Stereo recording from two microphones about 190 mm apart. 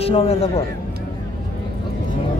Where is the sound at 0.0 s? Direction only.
30° left (ahead or behind).